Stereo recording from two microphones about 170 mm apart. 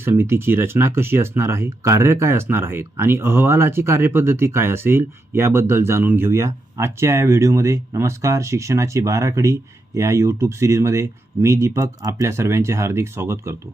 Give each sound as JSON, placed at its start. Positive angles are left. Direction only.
{"t": 0.0, "sound": "speech", "side_deg": -15}